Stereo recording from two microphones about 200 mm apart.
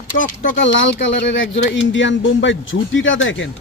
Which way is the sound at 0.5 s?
70° left (ahead or behind).